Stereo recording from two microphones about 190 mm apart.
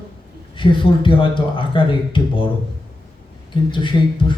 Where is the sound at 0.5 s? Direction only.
25° left (ahead or behind).